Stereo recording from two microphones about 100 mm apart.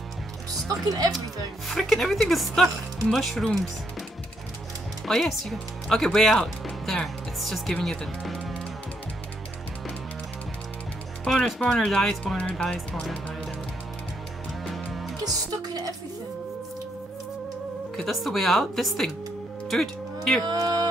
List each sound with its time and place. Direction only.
0.8 s music: 40° right (ahead or behind)
1.7 s speech: centre (ahead or behind)
5.0 s speech: 5° left (ahead or behind)
11.2 s speech: centre (ahead or behind)
12.4 s speech: 15° left (ahead or behind)
14.6 s music: centre (ahead or behind)
15.2 s speech: 40° right (ahead or behind)
17.9 s speech: centre (ahead or behind)
20.4 s music: 40° right (ahead or behind)